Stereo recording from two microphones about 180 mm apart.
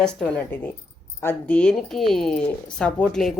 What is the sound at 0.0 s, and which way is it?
Speech, 5° left (ahead or behind).